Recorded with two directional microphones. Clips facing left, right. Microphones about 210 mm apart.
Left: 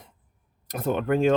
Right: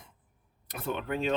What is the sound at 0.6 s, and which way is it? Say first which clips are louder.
Speech: left 9 dB; 45° left (ahead or behind).